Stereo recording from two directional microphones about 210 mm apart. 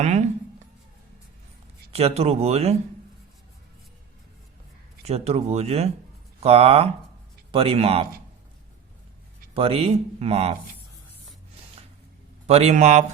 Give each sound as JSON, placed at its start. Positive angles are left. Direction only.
{"t": 0.0, "sound": "a man's voice", "side_deg": -35}
{"t": 1.9, "sound": "speech", "side_deg": -30}
{"t": 5.0, "sound": "speech", "side_deg": -30}
{"t": 9.6, "sound": "speech", "side_deg": -30}
{"t": 12.5, "sound": "a man's voice", "side_deg": -30}